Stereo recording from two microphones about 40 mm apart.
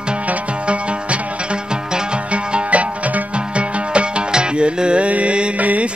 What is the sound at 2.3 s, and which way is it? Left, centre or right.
Music, right.